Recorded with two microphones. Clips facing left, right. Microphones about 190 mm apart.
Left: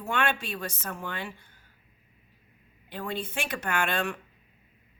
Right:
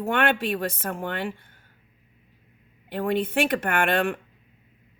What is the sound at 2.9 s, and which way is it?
Speech, 55° right (ahead or behind).